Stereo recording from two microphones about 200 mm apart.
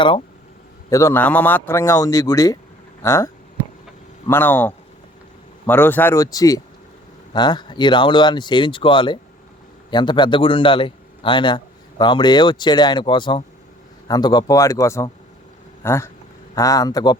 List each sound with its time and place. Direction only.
0.9 s speech: 15° left (ahead or behind)
4.3 s a man's voice: 10° left (ahead or behind)